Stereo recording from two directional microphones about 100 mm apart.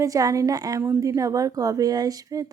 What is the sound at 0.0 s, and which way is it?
Speech, 35° right (ahead or behind).